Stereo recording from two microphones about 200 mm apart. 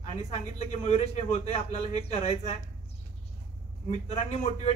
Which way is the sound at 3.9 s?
30° left (ahead or behind).